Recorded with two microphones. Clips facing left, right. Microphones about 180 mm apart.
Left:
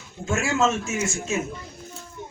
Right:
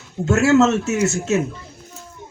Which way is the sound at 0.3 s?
70° right (ahead or behind).